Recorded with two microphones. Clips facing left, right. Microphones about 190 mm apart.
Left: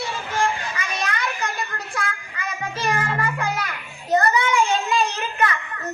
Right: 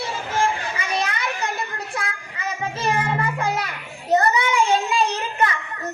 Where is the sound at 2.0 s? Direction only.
25° right (ahead or behind).